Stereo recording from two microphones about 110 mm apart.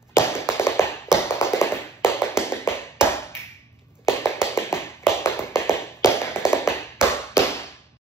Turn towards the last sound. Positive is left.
turn(degrees=25)  # may be behind; listen again after turning